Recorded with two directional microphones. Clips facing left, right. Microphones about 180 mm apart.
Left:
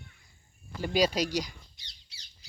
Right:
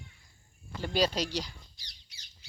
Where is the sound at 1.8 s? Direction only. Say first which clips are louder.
Even; 30° left (ahead or behind).